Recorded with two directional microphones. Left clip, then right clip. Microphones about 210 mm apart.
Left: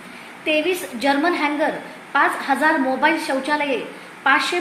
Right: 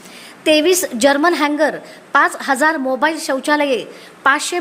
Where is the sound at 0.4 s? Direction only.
55° right (ahead or behind).